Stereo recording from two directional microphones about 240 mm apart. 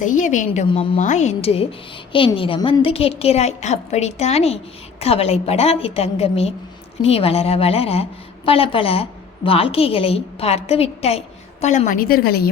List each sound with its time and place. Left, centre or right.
0.0 s a woman's voice: left